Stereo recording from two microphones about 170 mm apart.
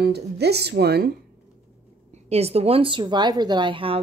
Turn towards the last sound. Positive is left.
turn(degrees=-30)  # may be behind; listen again after turning